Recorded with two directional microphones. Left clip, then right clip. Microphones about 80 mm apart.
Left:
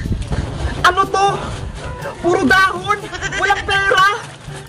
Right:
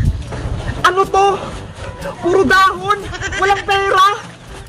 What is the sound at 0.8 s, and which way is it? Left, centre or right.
Speech, centre.